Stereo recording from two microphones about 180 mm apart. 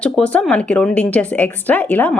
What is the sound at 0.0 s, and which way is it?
A woman's voice, 5° left (ahead or behind).